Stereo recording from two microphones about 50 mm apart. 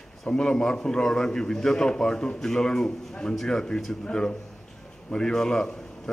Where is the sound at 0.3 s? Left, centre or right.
Centre.